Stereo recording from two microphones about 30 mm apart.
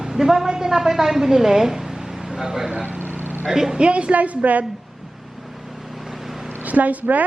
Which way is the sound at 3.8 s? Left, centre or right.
Right.